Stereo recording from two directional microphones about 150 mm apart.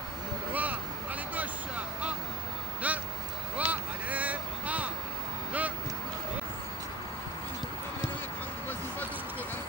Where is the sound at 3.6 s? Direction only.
10° right (ahead or behind).